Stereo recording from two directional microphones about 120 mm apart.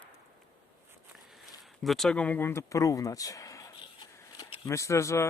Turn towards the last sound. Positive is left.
turn(degrees=25)  # may be behind; listen again after turning